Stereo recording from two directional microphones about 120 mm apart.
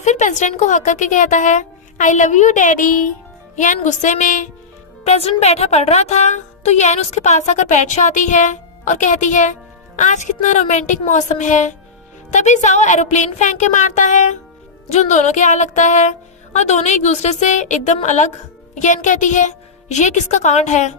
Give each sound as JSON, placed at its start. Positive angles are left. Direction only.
{"t": 0.0, "sound": "speech", "side_deg": 80}
{"t": 5.0, "sound": "a woman's voice", "side_deg": 60}
{"t": 14.9, "sound": "a woman's voice", "side_deg": 80}